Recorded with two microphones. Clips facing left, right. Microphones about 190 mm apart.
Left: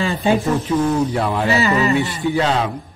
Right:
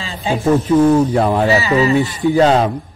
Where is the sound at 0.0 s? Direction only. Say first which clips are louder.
Left 4 dB; 55° left (ahead or behind).